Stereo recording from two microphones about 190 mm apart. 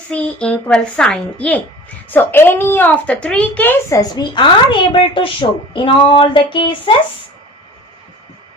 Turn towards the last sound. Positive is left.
turn(degrees=25)  # may be behind; listen again after turning